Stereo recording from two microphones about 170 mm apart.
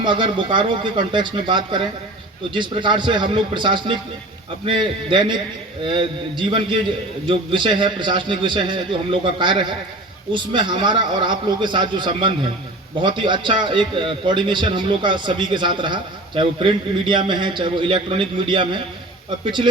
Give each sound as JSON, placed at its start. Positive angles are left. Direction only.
{"t": 0.0, "sound": "a man's voice", "side_deg": -30}